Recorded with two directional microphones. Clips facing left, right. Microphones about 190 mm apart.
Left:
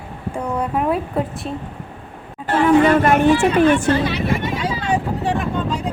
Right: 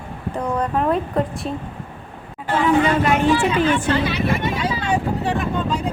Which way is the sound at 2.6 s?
50° left (ahead or behind).